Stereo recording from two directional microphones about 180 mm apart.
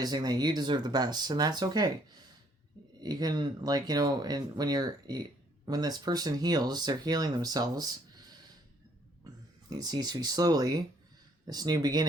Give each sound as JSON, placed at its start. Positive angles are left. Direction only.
{"t": 0.0, "sound": "speech", "side_deg": -20}
{"t": 9.6, "sound": "speech", "side_deg": -20}